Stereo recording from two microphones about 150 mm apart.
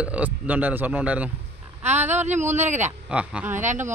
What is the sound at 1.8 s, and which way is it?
Speech, 50° right (ahead or behind).